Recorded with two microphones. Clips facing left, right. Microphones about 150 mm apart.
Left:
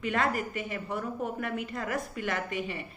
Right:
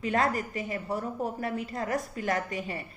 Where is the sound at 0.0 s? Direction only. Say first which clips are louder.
Right 2 dB; 35° right (ahead or behind).